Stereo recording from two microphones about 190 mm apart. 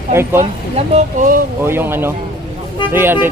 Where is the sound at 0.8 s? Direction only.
40° right (ahead or behind).